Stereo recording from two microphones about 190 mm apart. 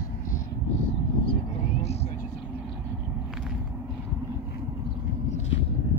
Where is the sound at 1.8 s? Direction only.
35° left (ahead or behind).